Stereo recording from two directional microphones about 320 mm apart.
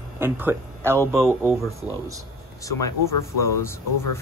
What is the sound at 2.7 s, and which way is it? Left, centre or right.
Speech, left.